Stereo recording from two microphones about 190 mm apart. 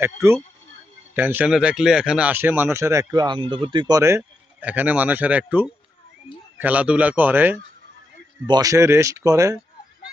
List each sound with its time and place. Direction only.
0.0 s speech: 15° right (ahead or behind)